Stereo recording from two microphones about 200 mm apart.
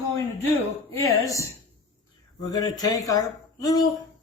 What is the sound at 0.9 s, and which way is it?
Speech, 15° left (ahead or behind).